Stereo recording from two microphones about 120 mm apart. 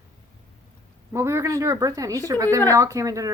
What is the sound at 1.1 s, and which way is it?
A woman's voice, 25° right (ahead or behind).